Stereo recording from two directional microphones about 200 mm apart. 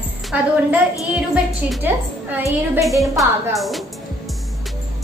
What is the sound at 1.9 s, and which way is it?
Child singing, 10° right (ahead or behind).